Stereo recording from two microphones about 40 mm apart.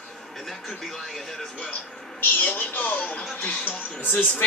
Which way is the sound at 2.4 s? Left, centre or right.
Left.